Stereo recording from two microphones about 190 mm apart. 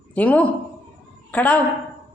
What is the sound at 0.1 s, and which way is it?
A man's voice, 5° left (ahead or behind).